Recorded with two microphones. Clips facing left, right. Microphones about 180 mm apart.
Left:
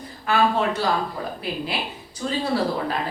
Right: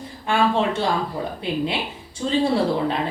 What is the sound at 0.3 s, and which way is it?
Speech, 25° right (ahead or behind).